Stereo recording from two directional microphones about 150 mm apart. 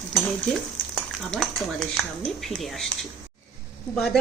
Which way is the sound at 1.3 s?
5° left (ahead or behind).